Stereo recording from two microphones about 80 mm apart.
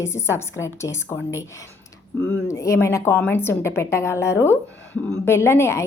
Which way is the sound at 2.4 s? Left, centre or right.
Left.